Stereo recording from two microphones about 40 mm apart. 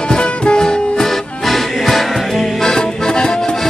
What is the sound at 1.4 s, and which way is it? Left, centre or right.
Music, centre.